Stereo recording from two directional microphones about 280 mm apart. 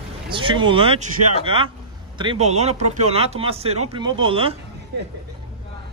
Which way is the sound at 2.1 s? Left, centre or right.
Centre.